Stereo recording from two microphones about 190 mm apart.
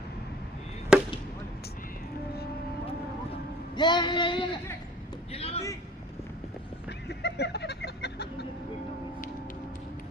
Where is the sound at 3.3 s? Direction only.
25° left (ahead or behind).